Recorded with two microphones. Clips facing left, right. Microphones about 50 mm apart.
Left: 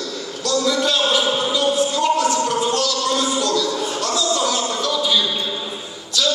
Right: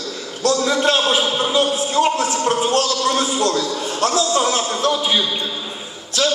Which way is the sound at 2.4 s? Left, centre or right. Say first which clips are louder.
Right 2 dB; right.